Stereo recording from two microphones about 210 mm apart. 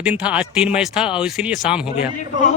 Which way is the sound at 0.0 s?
5° right (ahead or behind).